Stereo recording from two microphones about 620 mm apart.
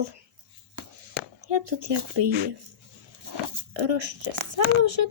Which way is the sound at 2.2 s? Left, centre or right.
Right.